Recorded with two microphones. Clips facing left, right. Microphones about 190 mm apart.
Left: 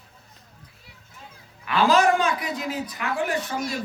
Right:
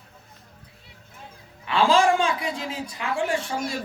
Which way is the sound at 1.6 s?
25° right (ahead or behind).